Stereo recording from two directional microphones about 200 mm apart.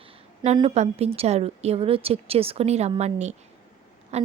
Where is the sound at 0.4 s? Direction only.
30° right (ahead or behind).